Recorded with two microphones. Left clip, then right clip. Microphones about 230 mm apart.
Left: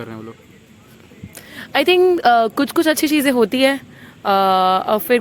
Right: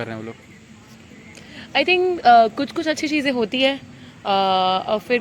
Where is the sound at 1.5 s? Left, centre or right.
Left.